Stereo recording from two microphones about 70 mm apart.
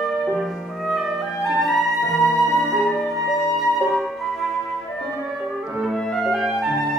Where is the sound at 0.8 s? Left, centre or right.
Centre.